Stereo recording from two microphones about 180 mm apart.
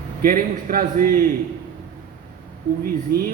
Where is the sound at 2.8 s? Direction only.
55° right (ahead or behind).